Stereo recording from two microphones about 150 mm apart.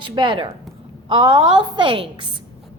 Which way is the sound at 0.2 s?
35° right (ahead or behind).